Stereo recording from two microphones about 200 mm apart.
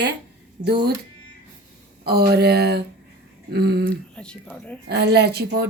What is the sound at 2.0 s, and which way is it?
Speech, 50° right (ahead or behind).